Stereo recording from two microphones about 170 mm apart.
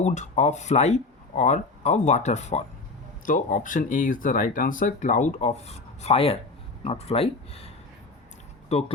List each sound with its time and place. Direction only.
0.0 s speech: 45° left (ahead or behind)
8.7 s speech: 40° left (ahead or behind)